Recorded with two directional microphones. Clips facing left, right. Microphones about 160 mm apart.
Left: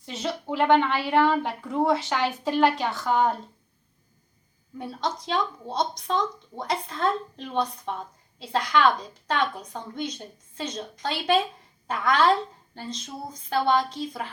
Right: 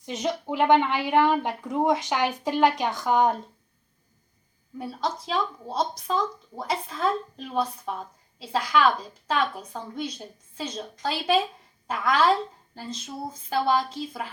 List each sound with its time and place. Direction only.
0.0 s a woman's voice: 15° right (ahead or behind)
4.8 s speech: 5° right (ahead or behind)